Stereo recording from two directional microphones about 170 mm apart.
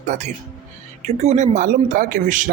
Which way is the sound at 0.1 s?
45° right (ahead or behind).